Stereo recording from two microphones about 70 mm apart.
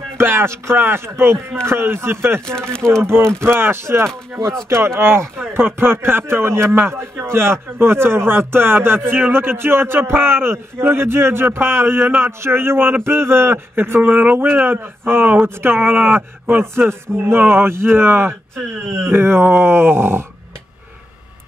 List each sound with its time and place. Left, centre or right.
0.2 s a man's voice: right
2.7 s speech: centre
3.0 s a man's voice: right
3.3 s speech: centre
3.5 s a man's voice: right